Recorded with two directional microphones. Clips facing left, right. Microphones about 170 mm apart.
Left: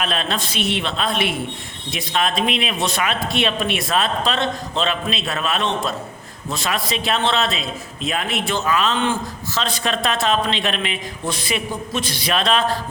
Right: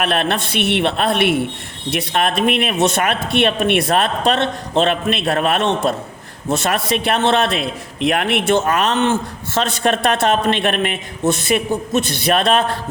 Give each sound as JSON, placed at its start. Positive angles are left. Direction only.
{"t": 0.0, "sound": "a man's voice", "side_deg": -60}